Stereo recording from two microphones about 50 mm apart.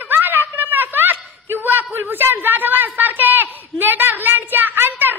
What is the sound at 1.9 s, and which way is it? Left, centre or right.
A woman's voice, right.